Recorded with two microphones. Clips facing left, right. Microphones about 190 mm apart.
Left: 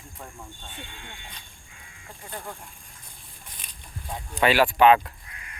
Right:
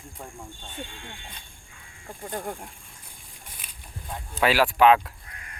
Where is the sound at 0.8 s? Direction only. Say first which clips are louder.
Right 7 dB; 45° right (ahead or behind).